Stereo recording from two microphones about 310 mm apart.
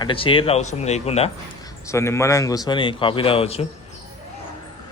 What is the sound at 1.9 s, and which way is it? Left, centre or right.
Speech, centre.